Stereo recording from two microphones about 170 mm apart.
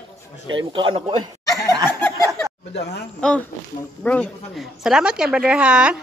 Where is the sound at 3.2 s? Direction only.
5° left (ahead or behind).